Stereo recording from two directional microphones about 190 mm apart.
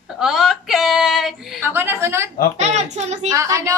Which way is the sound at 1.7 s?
10° right (ahead or behind).